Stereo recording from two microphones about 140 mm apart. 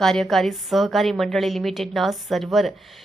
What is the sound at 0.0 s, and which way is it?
A woman's voice, 5° left (ahead or behind).